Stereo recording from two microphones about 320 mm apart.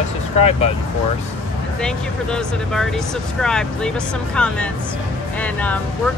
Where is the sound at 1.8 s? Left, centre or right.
Centre.